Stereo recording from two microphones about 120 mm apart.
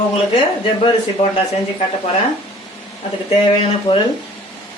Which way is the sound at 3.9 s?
35° left (ahead or behind).